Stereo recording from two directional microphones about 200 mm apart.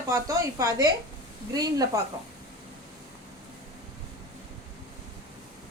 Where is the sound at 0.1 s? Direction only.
15° right (ahead or behind).